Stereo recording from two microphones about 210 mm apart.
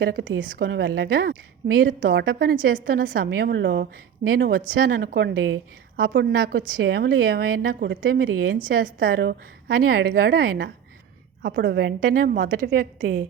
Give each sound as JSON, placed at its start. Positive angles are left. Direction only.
{"t": 0.0, "sound": "a woman's voice", "side_deg": -50}
{"t": 0.7, "sound": "a woman's voice", "side_deg": -50}
{"t": 11.9, "sound": "a woman's voice", "side_deg": -40}